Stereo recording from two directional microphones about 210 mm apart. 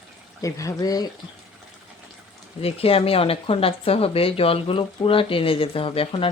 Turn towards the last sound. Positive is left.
turn(degrees=25)  # may be behind; listen again after turning